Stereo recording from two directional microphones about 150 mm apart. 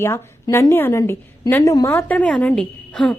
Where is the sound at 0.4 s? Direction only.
20° left (ahead or behind).